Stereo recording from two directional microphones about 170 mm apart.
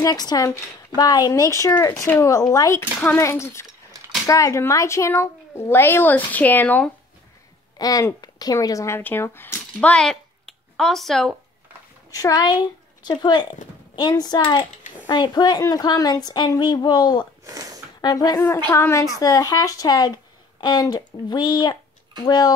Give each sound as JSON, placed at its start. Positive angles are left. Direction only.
{"t": 0.0, "sound": "a woman's voice", "side_deg": 25}
{"t": 7.8, "sound": "speech", "side_deg": 20}
{"t": 12.1, "sound": "a woman's voice", "side_deg": 20}
{"t": 17.5, "sound": "a sound", "side_deg": -20}
{"t": 18.0, "sound": "a woman's voice", "side_deg": 20}